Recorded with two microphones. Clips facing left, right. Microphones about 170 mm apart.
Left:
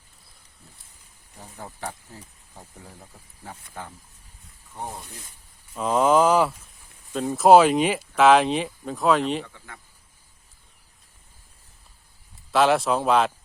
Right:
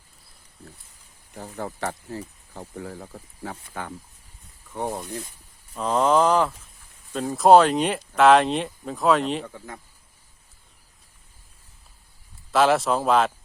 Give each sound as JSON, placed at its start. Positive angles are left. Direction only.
{"t": 1.4, "sound": "speech", "side_deg": -80}
{"t": 5.7, "sound": "speech", "side_deg": 5}
{"t": 12.5, "sound": "speech", "side_deg": 0}